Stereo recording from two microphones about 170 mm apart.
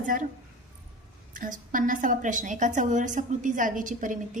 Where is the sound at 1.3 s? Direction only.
55° right (ahead or behind).